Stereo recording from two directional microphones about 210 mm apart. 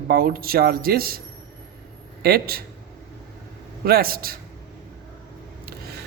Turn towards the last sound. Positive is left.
turn(degrees=-45)  # may be behind; listen again after turning